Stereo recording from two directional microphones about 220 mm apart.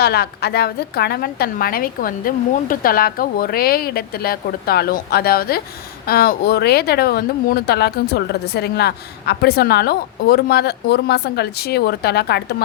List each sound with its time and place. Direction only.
0.0 s speech: 45° left (ahead or behind)